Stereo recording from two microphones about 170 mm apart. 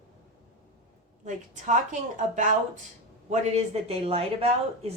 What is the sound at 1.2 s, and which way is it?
Speech, 45° right (ahead or behind).